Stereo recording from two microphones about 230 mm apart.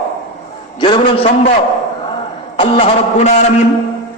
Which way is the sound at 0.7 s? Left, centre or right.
Left.